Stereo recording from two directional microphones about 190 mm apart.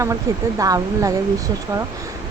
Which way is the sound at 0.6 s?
20° right (ahead or behind).